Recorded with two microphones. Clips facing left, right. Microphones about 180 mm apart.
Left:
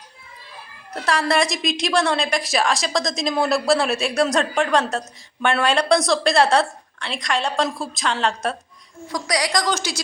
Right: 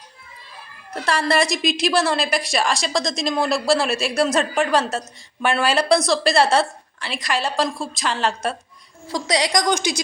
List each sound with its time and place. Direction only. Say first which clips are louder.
0.9 s a woman's voice: even; centre (ahead or behind)
9.0 s a woman's voice: right 2 dB; 25° right (ahead or behind)